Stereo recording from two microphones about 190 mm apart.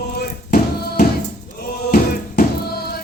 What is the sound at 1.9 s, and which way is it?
Music, 55° left (ahead or behind).